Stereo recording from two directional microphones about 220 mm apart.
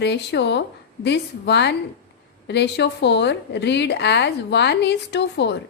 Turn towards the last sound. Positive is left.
turn(degrees=50)  # may be behind; listen again after turning